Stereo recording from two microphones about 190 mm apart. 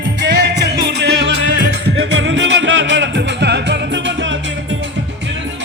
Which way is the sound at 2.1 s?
80° right.